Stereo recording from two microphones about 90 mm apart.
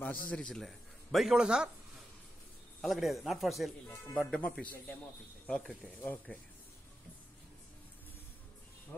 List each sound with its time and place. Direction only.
0.0 s a man's voice: 15° left (ahead or behind); by 1.7 s 10° right (ahead or behind)
2.8 s a man's voice: centre (ahead or behind)
4.1 s a man's voice: 10° left (ahead or behind)
6.3 s speech: 15° left (ahead or behind)